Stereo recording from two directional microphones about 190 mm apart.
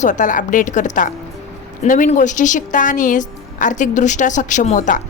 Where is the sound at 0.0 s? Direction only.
40° left (ahead or behind).